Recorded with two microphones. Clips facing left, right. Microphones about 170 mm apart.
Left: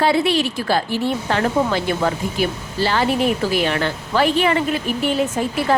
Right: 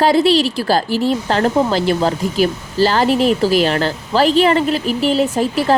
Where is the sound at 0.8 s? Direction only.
90° right.